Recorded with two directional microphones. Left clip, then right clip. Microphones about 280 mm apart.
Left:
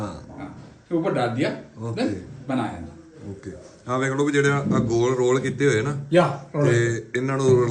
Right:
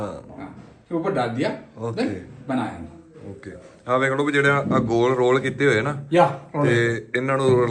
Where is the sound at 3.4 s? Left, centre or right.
Centre.